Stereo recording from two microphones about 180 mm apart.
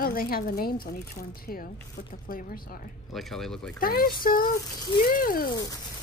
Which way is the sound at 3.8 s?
55° left (ahead or behind).